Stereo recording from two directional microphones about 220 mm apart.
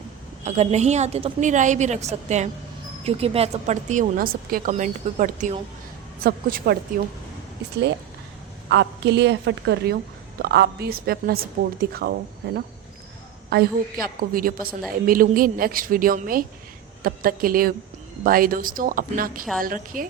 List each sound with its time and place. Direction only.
0.4 s a woman's voice: 30° right (ahead or behind)
8.7 s a woman's voice: 55° right (ahead or behind)